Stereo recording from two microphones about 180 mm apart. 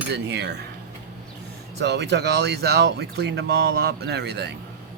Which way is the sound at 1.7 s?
70° right (ahead or behind).